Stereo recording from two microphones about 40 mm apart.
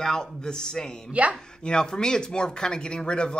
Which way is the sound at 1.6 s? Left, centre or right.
Left.